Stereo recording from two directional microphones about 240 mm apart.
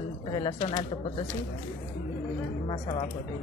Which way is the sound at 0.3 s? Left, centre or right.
Centre.